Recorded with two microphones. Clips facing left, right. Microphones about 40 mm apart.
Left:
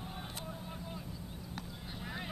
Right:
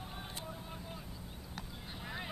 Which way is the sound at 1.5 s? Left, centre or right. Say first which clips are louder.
Even; centre.